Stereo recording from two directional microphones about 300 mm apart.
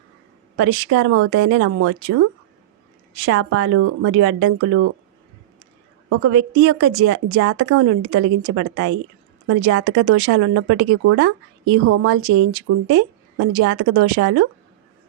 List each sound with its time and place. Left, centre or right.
0.5 s a woman's voice: right
3.2 s a woman's voice: right
6.1 s a woman's voice: right